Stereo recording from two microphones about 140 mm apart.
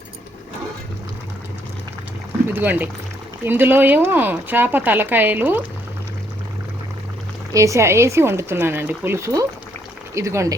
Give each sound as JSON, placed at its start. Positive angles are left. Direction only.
{"t": 2.5, "sound": "speech", "side_deg": -15}
{"t": 7.5, "sound": "speech", "side_deg": -20}